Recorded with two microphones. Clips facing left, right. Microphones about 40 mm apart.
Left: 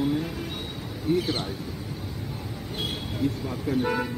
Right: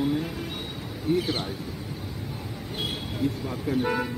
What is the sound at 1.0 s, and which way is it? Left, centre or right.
Speech, centre.